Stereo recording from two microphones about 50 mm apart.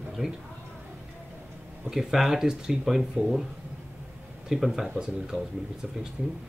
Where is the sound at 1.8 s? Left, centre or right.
Centre.